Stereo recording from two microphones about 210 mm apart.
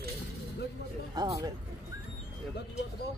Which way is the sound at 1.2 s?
15° right (ahead or behind).